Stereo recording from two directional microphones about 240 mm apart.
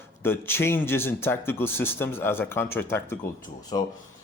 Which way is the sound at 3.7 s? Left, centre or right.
Centre.